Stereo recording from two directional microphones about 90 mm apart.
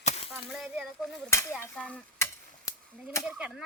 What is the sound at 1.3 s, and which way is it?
Speech, 30° left (ahead or behind).